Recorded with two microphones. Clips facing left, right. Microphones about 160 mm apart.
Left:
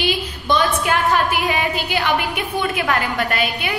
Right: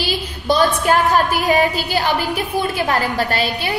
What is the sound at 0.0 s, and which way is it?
A woman's voice, 35° right (ahead or behind).